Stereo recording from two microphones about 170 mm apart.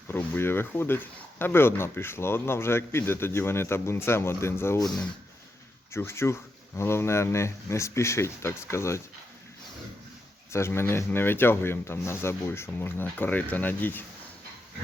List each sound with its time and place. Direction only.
0.1 s speech: 10° left (ahead or behind)
5.9 s speech: 15° left (ahead or behind)
10.5 s speech: 15° left (ahead or behind)